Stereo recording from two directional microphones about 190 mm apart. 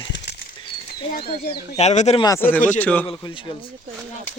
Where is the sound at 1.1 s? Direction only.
55° left (ahead or behind).